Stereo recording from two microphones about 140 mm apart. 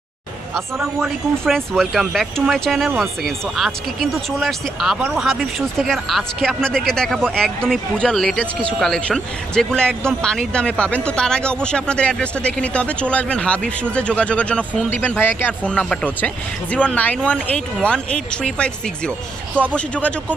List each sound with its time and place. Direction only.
0.9 s speech: centre (ahead or behind)